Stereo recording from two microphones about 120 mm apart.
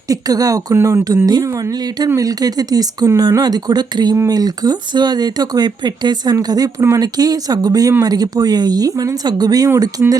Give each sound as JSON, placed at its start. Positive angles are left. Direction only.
{"t": 0.1, "sound": "speech", "side_deg": -30}